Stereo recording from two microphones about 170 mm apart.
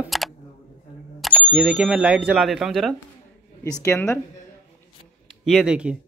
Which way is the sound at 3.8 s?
15° left (ahead or behind).